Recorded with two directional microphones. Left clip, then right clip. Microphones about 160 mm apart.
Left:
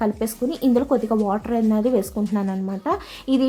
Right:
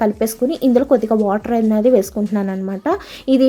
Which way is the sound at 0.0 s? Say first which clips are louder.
Right 6 dB; 20° right (ahead or behind).